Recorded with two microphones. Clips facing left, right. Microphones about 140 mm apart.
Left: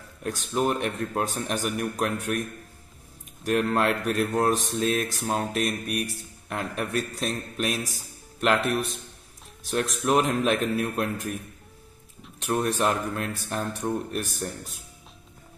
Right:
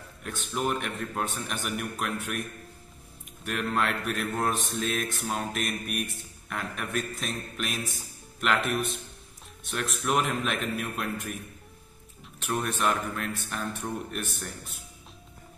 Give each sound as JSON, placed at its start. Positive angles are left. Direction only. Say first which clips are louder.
{"t": 0.2, "sound": "a man's voice", "louder": "left 5 dB", "side_deg": 35}
{"t": 3.4, "sound": "a man's voice", "louder": "left 6 dB", "side_deg": 35}
{"t": 12.6, "sound": "a man's voice", "louder": "left 2 dB", "side_deg": 35}